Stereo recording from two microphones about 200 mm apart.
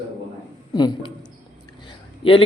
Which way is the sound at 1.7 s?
25° left (ahead or behind).